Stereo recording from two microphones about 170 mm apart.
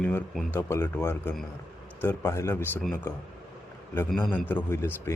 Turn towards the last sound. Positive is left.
turn(degrees=15)  # may be behind; listen again after turning